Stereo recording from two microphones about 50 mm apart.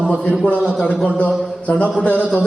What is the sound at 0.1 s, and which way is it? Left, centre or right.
A man's voice, left.